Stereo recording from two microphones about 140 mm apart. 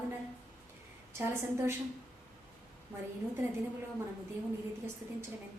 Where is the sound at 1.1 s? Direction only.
20° right (ahead or behind).